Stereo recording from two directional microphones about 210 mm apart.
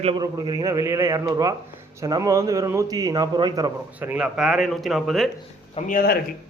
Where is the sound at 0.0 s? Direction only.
25° right (ahead or behind).